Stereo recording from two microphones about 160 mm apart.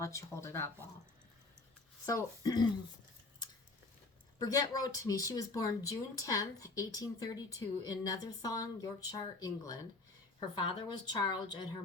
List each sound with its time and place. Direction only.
0.0 s speech: 20° left (ahead or behind)
2.0 s speech: 20° left (ahead or behind)
4.4 s speech: 25° left (ahead or behind)